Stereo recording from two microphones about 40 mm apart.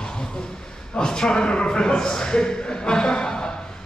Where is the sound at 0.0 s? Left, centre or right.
Centre.